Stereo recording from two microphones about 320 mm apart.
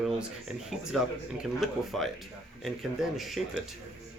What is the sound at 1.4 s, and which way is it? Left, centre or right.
Speech, centre.